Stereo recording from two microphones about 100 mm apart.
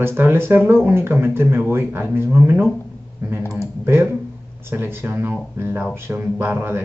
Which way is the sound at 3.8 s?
25° right (ahead or behind).